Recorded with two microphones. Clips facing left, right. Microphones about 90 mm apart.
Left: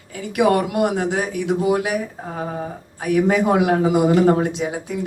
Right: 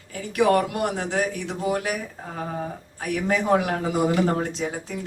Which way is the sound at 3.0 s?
15° left (ahead or behind).